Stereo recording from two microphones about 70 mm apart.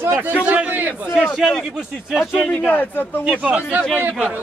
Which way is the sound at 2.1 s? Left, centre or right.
Centre.